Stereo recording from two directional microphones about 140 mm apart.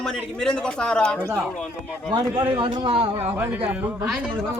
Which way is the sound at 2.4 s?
30° right (ahead or behind).